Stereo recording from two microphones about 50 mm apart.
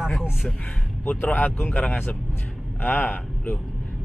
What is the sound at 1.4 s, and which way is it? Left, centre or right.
A man's voice, left.